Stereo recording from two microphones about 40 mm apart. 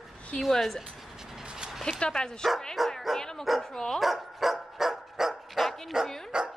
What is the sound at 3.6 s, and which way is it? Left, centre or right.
Speech, centre.